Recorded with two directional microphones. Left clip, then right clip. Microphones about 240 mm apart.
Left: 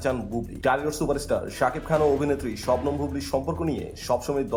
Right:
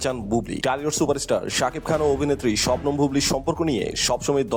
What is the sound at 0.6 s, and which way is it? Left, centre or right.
Speech, right.